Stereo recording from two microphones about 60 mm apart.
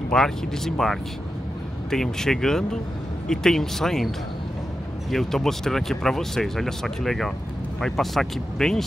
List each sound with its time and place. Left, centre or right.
0.1 s speech: centre
5.1 s speech: centre